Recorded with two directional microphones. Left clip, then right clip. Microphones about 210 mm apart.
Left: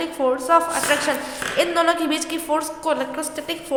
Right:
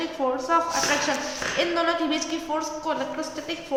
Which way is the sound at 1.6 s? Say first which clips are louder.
Left 5 dB; 45° left (ahead or behind).